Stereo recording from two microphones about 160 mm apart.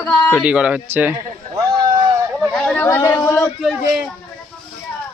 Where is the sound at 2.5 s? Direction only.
5° left (ahead or behind).